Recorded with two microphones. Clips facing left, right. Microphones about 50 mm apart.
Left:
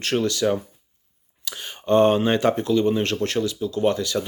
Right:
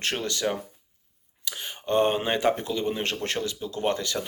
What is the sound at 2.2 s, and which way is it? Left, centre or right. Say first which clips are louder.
Speech: left 4 dB; centre.